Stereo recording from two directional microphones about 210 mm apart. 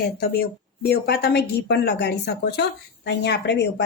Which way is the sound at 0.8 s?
50° left (ahead or behind).